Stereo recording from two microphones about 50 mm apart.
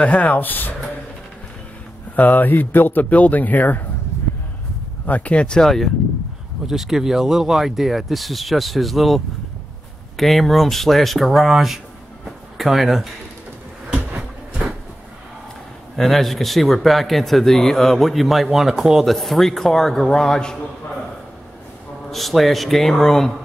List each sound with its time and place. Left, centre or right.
0.0 s a man's voice: left
2.1 s a man's voice: left
5.0 s speech: left
5.6 s speech: centre
6.7 s speech: centre
12.3 s a sound: centre
13.9 s a sound: centre
16.0 s speech: centre
22.1 s speech: centre